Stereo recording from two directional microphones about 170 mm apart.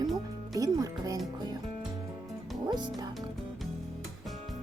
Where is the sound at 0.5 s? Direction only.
20° right (ahead or behind).